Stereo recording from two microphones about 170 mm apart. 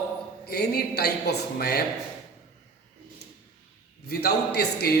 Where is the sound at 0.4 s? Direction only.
70° left (ahead or behind).